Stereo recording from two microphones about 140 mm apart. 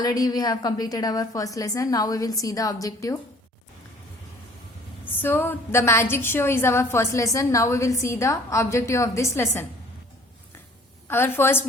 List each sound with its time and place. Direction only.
0.0 s a woman's voice: 25° left (ahead or behind)
5.0 s a woman's voice: 15° left (ahead or behind)
11.1 s a woman's voice: 15° left (ahead or behind)